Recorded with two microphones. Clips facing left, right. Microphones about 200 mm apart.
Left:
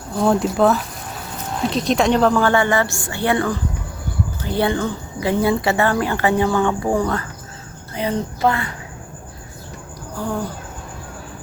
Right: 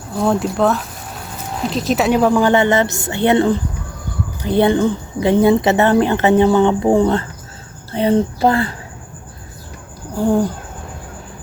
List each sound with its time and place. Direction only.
0.2 s speech: centre (ahead or behind); by 8.7 s 30° right (ahead or behind)
10.2 s speech: 30° right (ahead or behind)